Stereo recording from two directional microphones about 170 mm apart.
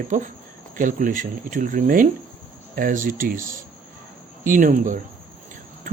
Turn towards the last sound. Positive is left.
turn(degrees=-50)  # may be behind; listen again after turning